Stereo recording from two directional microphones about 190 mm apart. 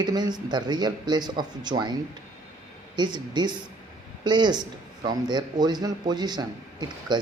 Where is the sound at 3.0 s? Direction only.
25° right (ahead or behind).